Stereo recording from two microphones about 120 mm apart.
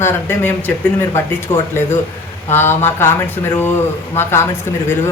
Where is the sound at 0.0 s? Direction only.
20° left (ahead or behind).